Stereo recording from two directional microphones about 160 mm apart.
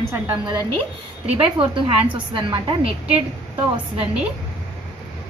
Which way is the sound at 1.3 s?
35° right (ahead or behind).